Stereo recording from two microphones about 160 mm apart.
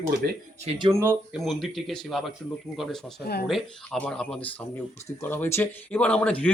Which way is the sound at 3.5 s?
Centre (ahead or behind).